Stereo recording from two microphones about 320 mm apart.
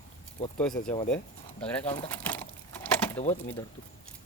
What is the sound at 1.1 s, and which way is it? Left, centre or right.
Speech, centre.